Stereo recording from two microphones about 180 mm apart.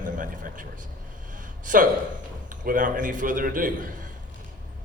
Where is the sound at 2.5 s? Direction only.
50° right (ahead or behind).